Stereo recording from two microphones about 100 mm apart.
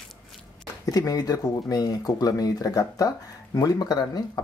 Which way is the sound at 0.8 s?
40° left (ahead or behind).